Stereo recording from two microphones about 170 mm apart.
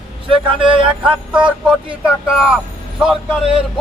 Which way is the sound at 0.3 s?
30° right (ahead or behind).